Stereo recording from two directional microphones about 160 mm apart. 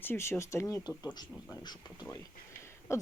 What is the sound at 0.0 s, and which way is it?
Speech, 15° left (ahead or behind).